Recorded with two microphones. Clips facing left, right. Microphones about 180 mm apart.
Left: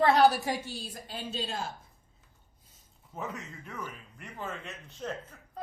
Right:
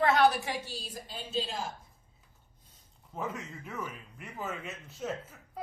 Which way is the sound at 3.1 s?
Centre (ahead or behind).